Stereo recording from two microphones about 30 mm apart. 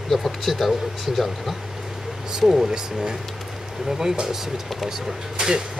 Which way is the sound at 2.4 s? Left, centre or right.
Centre.